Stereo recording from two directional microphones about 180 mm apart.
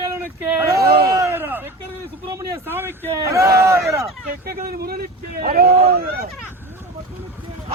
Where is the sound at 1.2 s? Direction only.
10° right (ahead or behind).